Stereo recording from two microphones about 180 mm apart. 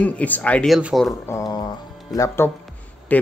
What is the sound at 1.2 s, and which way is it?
Mantra, 20° left (ahead or behind).